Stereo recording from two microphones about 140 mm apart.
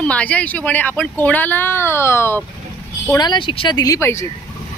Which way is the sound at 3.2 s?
35° left (ahead or behind).